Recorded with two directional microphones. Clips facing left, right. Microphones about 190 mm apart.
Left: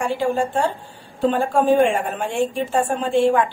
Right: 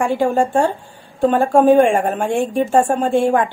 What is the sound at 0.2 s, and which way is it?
A woman's voice, 50° right (ahead or behind).